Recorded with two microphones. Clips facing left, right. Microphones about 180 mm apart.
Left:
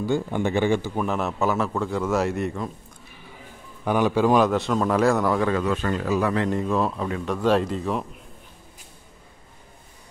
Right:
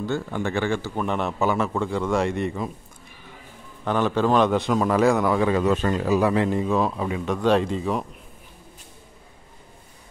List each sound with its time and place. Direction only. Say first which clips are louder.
0.0 s speech: left 3 dB; 15° left (ahead or behind)
0.9 s speech: even; 5° left (ahead or behind)
3.8 s speech: left 1 dB; 10° left (ahead or behind)
5.5 s speech: right 3 dB; 25° right (ahead or behind)
7.3 s speech: right 1 dB; centre (ahead or behind)